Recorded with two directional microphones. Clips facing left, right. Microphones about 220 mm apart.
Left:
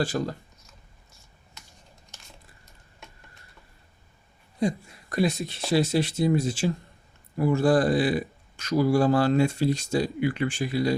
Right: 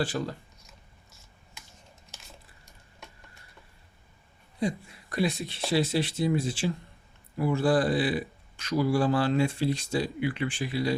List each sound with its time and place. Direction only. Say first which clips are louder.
0.0 s speech: left 3 dB; 45° left (ahead or behind)
4.6 s speech: left 3 dB; 45° left (ahead or behind)